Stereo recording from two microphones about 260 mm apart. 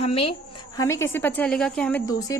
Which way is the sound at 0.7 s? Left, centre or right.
Centre.